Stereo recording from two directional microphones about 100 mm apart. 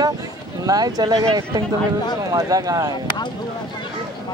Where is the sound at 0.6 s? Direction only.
40° right (ahead or behind).